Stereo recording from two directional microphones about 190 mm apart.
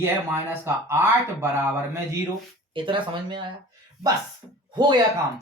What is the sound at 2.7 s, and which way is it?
Speech, 25° right (ahead or behind).